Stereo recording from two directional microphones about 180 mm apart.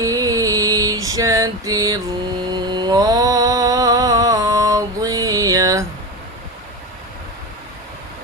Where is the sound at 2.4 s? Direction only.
25° right (ahead or behind).